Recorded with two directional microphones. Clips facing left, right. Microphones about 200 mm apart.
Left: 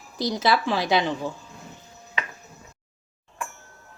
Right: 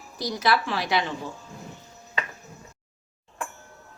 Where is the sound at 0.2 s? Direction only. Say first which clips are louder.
Left 2 dB; 25° left (ahead or behind).